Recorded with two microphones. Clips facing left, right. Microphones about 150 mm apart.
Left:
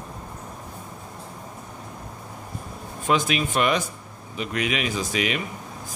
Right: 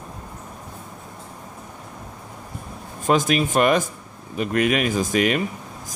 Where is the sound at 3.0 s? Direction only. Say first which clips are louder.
Right 4 dB; 45° right (ahead or behind).